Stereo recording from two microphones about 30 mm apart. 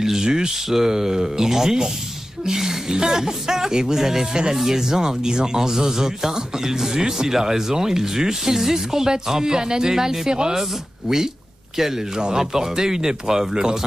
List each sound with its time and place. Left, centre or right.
0.0 s speech: centre